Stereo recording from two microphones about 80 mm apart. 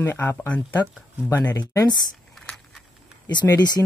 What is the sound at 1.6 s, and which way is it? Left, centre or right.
Speech, left.